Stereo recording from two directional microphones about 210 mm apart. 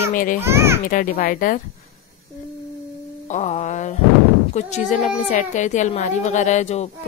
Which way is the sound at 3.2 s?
35° left (ahead or behind).